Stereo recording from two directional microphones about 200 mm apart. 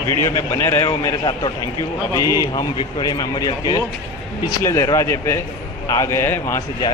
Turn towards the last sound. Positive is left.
turn(degrees=15)  # may be behind; listen again after turning